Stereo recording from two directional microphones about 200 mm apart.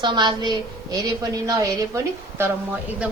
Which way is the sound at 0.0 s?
20° right (ahead or behind).